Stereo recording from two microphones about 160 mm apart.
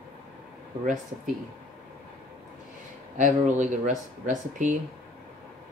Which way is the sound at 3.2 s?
50° right (ahead or behind).